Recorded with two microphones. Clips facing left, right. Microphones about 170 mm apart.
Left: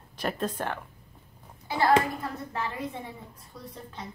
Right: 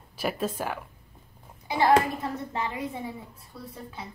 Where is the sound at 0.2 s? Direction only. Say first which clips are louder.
Right 1 dB; 5° right (ahead or behind).